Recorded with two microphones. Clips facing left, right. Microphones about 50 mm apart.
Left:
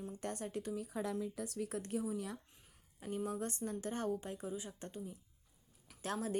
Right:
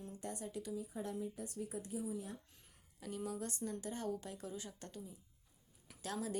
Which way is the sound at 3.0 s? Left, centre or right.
Left.